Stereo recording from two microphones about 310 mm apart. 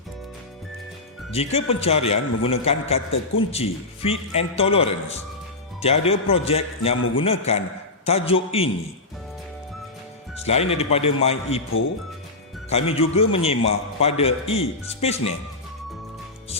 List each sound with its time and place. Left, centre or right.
1.3 s a man's voice: centre
10.4 s a man's voice: centre
12.7 s a man's voice: centre